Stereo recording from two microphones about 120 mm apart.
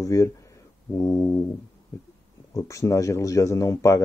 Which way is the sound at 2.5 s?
25° left (ahead or behind).